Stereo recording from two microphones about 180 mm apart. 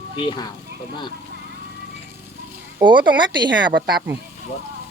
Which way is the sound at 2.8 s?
25° right (ahead or behind).